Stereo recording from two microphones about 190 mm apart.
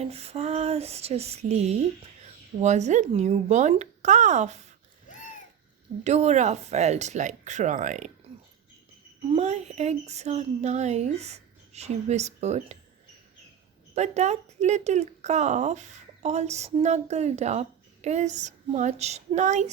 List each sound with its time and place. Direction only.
0.0 s speech: 35° right (ahead or behind)
6.1 s speech: 35° right (ahead or behind)
9.3 s speech: 35° right (ahead or behind)
13.9 s speech: 35° right (ahead or behind)